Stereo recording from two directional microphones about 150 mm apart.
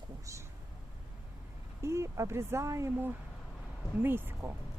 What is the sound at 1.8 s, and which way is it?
Speech, 20° right (ahead or behind).